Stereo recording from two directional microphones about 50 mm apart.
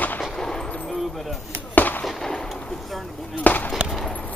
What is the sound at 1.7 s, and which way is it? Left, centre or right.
Fireworks, left.